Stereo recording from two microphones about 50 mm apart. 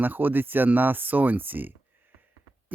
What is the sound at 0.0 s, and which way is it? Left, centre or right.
Speech, right.